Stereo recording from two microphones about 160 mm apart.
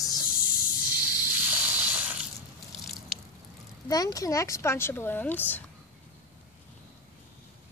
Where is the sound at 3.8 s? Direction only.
25° left (ahead or behind).